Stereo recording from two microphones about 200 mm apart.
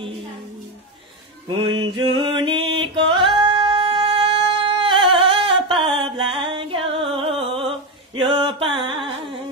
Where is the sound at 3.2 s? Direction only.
25° right (ahead or behind).